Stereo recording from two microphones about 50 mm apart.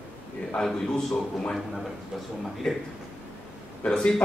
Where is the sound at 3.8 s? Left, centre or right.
Centre.